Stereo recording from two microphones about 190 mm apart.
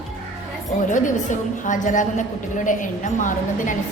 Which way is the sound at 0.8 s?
40° left (ahead or behind).